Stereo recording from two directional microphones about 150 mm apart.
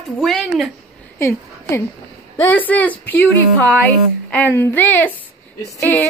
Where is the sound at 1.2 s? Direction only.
20° left (ahead or behind).